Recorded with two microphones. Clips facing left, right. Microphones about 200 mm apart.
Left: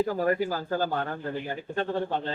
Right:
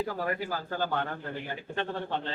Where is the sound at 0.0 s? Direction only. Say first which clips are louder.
Left 7 dB; 45° left (ahead or behind).